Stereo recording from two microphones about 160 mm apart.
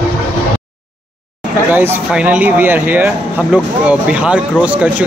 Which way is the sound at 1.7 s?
10° right (ahead or behind).